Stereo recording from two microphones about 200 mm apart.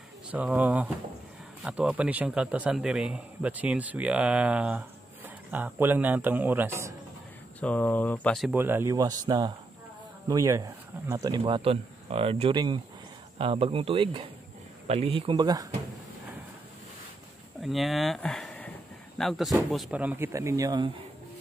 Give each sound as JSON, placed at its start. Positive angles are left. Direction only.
{"t": 0.3, "sound": "a man's voice", "side_deg": -10}
{"t": 7.6, "sound": "a man's voice", "side_deg": 10}
{"t": 17.6, "sound": "a man's voice", "side_deg": 0}